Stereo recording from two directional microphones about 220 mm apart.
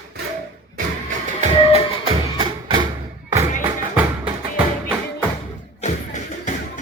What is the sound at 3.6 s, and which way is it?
Music, 5° right (ahead or behind).